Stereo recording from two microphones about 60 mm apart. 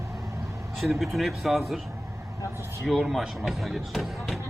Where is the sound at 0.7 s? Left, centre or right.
Centre.